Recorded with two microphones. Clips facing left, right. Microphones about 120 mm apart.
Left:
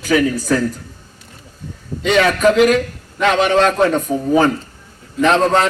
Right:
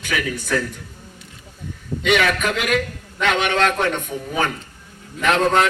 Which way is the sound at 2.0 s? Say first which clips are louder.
Left 6 dB; 35° left (ahead or behind).